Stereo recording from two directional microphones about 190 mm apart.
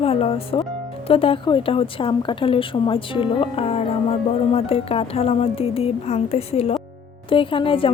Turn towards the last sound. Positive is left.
turn(degrees=30)  # may be behind; listen again after turning